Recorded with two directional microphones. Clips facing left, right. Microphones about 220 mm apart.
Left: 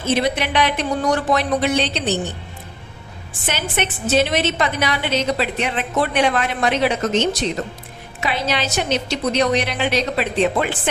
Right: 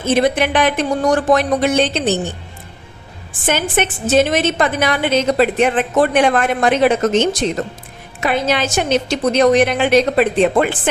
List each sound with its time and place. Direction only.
0.1 s a woman's voice: 50° right (ahead or behind)
3.4 s a woman's voice: 50° right (ahead or behind)